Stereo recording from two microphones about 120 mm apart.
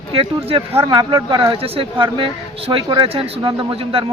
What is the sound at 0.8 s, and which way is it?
A man's voice, 40° right (ahead or behind).